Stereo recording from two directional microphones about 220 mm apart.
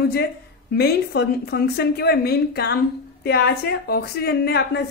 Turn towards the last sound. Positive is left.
turn(degrees=45)  # may be behind; listen again after turning